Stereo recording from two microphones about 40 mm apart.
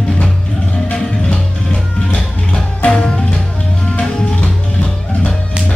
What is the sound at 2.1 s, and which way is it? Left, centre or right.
Music, left.